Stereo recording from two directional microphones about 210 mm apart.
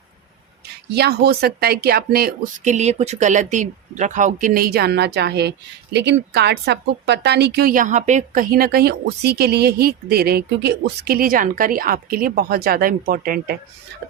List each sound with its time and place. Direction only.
0.9 s speech: 50° right (ahead or behind)